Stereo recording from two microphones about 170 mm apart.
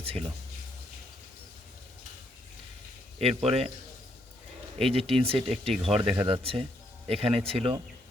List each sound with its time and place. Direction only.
0.0 s speech: 35° right (ahead or behind)
3.2 s speech: 35° right (ahead or behind)
4.8 s speech: 35° right (ahead or behind)